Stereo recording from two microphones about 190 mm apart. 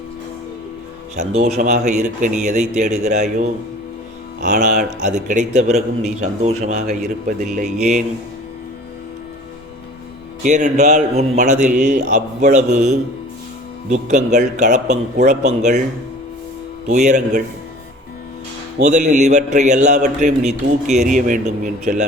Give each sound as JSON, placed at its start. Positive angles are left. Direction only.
{"t": 1.1, "sound": "speech", "side_deg": -35}
{"t": 10.4, "sound": "speech", "side_deg": -40}
{"t": 16.8, "sound": "speech", "side_deg": -40}
{"t": 18.8, "sound": "speech", "side_deg": -40}